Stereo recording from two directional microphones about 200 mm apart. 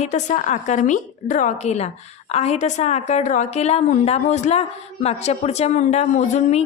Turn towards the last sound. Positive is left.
turn(degrees=35)  # may be behind; listen again after turning